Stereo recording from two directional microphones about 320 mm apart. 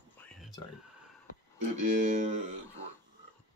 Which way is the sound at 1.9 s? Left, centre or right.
Right.